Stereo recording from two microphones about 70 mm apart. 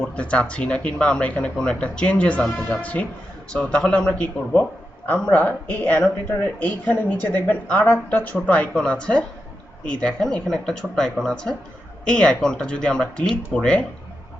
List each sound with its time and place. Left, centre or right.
0.1 s a woman's voice: centre
8.7 s speech: centre